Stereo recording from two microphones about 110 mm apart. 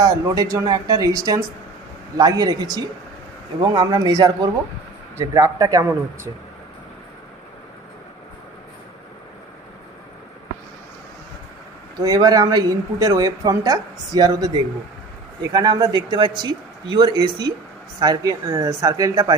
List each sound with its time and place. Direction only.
0.0 s speech: 30° right (ahead or behind)
11.9 s speech: 35° right (ahead or behind)